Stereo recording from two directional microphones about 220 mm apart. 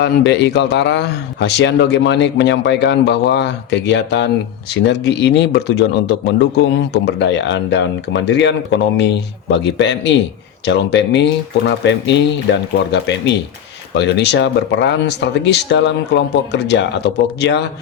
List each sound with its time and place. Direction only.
0.0 s speech: 50° left (ahead or behind)